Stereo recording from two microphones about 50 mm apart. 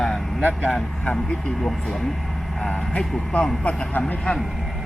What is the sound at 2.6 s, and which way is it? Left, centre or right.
Speech, centre.